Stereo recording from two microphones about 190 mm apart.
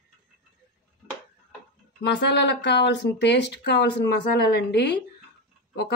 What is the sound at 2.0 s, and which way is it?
Speech, 65° left (ahead or behind).